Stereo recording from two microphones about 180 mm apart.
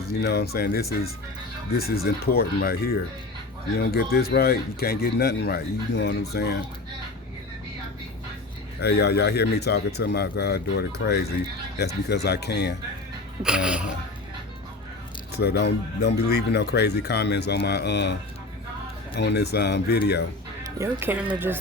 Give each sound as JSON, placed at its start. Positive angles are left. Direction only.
{"t": 0.0, "sound": "speech", "side_deg": 60}
{"t": 8.8, "sound": "speech", "side_deg": 65}
{"t": 13.4, "sound": "speech", "side_deg": -5}
{"t": 15.3, "sound": "speech", "side_deg": 65}
{"t": 19.1, "sound": "speech", "side_deg": 70}
{"t": 20.7, "sound": "speech", "side_deg": -15}